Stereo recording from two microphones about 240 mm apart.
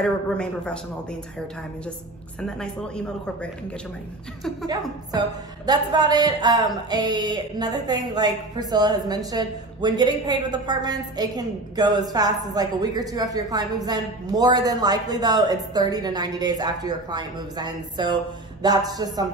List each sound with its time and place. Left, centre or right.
0.0 s speech: centre
2.4 s speech: centre
5.7 s speech: centre